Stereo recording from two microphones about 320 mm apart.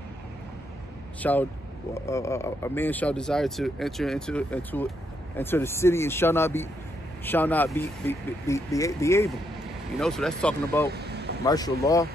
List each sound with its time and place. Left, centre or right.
1.2 s speech: centre
10.9 s vehicle: right
11.4 s speech: centre